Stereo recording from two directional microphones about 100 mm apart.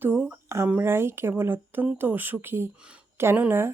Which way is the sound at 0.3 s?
25° right (ahead or behind).